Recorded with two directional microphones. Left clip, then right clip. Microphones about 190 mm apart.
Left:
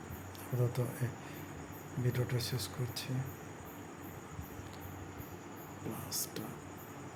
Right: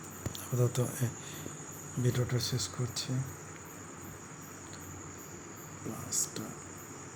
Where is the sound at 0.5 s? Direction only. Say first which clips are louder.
Right 4 dB; 15° right (ahead or behind).